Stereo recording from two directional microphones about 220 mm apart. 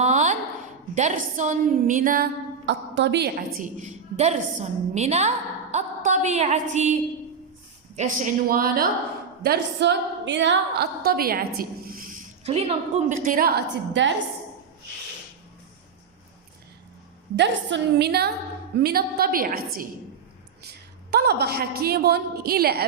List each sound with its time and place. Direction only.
0.0 s a sound: 30° right (ahead or behind)
0.9 s a woman's voice: 35° right (ahead or behind)
2.6 s a woman's voice: 55° right (ahead or behind)
17.3 s a woman's voice: 55° right (ahead or behind)